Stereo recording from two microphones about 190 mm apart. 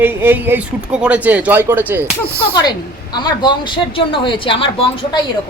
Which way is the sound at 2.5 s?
20° left (ahead or behind).